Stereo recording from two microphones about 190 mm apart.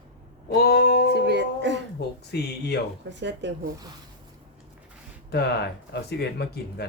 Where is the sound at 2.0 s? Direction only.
60° left (ahead or behind).